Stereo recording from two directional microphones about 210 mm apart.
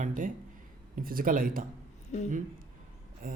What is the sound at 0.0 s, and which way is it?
Speech, 40° right (ahead or behind).